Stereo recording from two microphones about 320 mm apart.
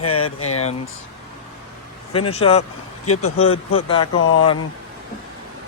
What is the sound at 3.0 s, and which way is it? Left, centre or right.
Speech, left.